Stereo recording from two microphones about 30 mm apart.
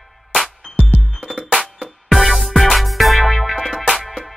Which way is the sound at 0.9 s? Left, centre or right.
Centre.